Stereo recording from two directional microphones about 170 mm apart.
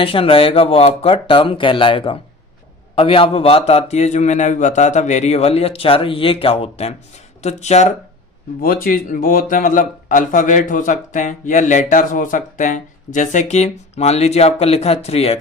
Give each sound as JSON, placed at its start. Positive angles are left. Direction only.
{"t": 0.0, "sound": "a man's voice", "side_deg": 35}
{"t": 8.6, "sound": "speech", "side_deg": 55}